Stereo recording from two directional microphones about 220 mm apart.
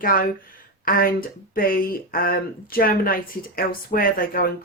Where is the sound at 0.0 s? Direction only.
40° left (ahead or behind).